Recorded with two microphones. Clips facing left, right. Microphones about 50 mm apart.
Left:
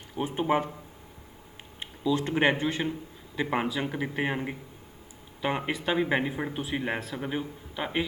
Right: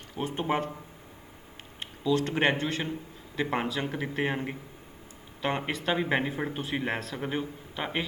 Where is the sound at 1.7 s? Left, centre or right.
Centre.